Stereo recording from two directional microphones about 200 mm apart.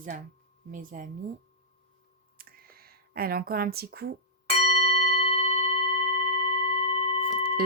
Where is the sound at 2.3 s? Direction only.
50° right (ahead or behind).